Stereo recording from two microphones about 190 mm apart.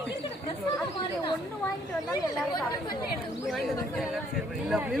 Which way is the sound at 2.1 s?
20° left (ahead or behind).